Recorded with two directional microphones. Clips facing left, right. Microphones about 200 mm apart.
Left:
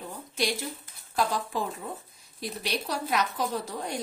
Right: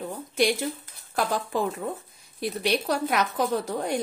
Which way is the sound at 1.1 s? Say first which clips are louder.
Right 2 dB; 55° right (ahead or behind).